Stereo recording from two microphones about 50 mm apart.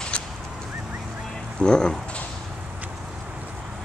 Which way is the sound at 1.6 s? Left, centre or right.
Centre.